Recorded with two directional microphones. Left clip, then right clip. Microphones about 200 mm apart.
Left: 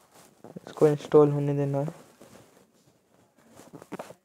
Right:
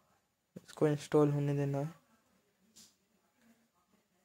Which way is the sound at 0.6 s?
20° left (ahead or behind).